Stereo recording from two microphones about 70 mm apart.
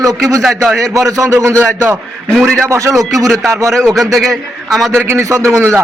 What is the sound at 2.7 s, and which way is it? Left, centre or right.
Speech, right.